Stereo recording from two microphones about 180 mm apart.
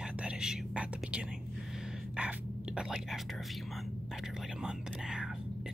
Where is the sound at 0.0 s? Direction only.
5° right (ahead or behind).